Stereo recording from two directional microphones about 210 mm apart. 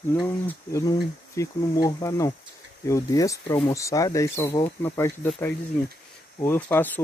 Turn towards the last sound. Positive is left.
turn(degrees=10)  # may be behind; listen again after turning